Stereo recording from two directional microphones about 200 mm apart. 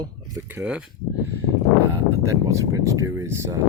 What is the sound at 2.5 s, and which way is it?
Speech, 15° right (ahead or behind).